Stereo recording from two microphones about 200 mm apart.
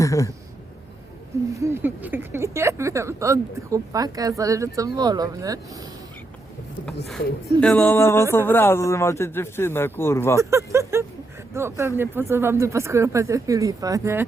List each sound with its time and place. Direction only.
0.0 s speech: 15° left (ahead or behind)
1.5 s a woman's voice: 15° right (ahead or behind)
7.6 s a man's voice: 5° left (ahead or behind)
10.3 s a woman's voice: 15° right (ahead or behind)